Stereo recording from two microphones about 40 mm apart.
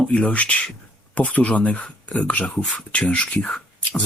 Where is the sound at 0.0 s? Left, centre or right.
Left.